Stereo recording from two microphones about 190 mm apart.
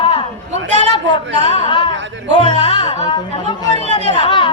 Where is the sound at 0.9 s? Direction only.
25° left (ahead or behind).